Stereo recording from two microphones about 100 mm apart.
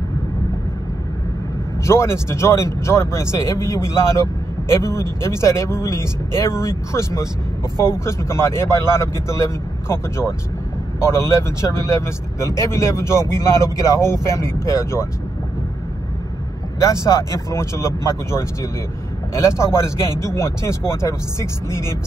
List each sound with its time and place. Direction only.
1.9 s speech: 30° left (ahead or behind)
16.8 s speech: 30° left (ahead or behind)